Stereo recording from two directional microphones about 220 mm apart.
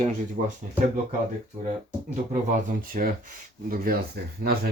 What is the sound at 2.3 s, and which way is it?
Speech, 35° right (ahead or behind).